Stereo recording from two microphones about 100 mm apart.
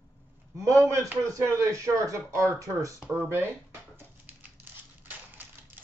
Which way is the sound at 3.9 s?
20° right (ahead or behind).